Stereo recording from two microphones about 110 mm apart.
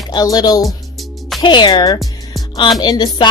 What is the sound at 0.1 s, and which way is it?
Speech, 35° left (ahead or behind).